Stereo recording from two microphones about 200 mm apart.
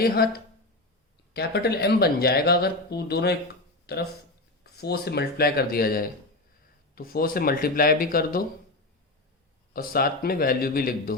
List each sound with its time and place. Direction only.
0.0 s speech: 50° left (ahead or behind)
9.7 s speech: 50° left (ahead or behind)